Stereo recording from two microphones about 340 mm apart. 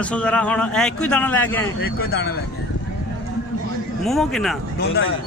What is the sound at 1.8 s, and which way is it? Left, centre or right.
Speech, left.